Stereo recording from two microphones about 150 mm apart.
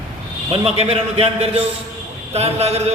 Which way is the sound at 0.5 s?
40° right (ahead or behind).